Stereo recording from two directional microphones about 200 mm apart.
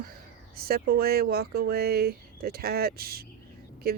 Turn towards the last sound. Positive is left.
turn(degrees=-50)  # may be behind; listen again after turning